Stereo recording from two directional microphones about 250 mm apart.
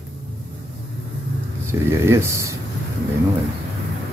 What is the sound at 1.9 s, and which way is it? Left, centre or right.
Speech, centre.